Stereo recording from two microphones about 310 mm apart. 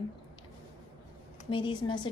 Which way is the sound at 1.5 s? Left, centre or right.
Centre.